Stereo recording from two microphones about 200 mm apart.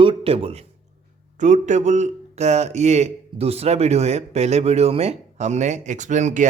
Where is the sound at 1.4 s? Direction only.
35° right (ahead or behind).